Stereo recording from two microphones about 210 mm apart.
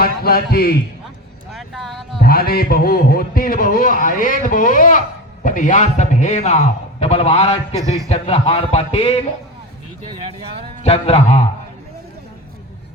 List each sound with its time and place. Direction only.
0.0 s a man's voice: 45° left (ahead or behind)
1.5 s speech: centre (ahead or behind)
2.2 s a man's voice: 45° left (ahead or behind); by 7.8 s 30° left (ahead or behind)
7.8 s a man's voice: 15° right (ahead or behind)
8.1 s speech: 30° left (ahead or behind)
10.8 s speech: 30° left (ahead or behind)